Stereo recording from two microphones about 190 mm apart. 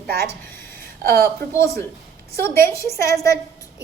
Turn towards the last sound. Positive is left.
turn(degrees=15)  # may be behind; listen again after turning